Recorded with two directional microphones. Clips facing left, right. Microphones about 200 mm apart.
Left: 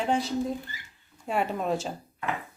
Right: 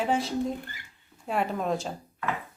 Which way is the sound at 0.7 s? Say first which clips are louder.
Left 1 dB; 55° right (ahead or behind).